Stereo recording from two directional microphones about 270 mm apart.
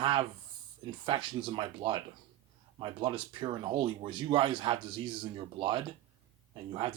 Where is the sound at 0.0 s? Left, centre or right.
Centre.